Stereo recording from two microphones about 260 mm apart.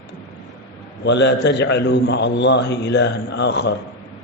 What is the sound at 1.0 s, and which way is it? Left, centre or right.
A man's voice, left.